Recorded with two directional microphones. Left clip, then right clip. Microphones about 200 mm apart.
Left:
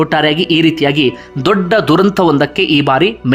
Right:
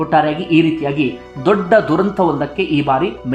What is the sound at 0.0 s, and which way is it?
Speech, 25° left (ahead or behind).